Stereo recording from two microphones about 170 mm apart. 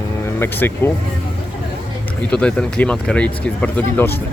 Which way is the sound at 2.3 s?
5° left (ahead or behind).